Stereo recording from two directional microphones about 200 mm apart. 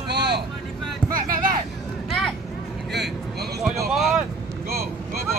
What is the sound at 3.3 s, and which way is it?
Vehicle, 55° right (ahead or behind).